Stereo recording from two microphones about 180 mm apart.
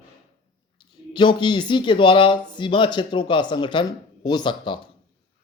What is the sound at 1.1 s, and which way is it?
Speech, 25° left (ahead or behind).